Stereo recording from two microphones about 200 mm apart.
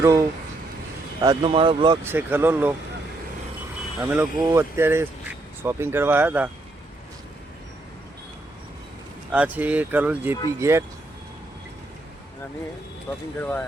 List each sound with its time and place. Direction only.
0.0 s speech: 15° right (ahead or behind)
2.0 s speech: 10° right (ahead or behind)
4.1 s speech: 15° right (ahead or behind)
9.3 s speech: 5° right (ahead or behind)
13.1 s speech: 10° left (ahead or behind)